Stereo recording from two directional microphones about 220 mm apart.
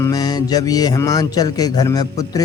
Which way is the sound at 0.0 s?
15° left (ahead or behind).